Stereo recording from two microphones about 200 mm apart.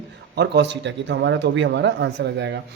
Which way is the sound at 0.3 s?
60° right (ahead or behind).